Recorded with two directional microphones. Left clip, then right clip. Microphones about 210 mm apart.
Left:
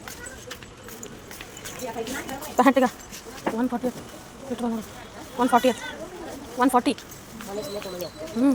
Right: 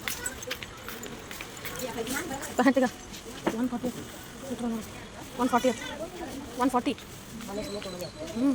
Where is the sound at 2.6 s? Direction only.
20° left (ahead or behind).